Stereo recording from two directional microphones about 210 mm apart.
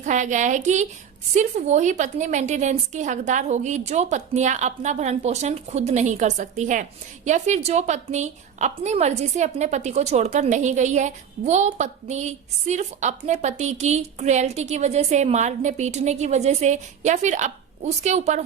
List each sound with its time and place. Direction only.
0.0 s a woman's voice: 35° right (ahead or behind)